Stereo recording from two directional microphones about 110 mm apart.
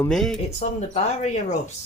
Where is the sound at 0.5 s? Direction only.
80° left.